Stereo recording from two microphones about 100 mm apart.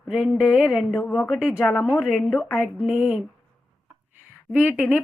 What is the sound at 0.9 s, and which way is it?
A woman's voice, 15° left (ahead or behind).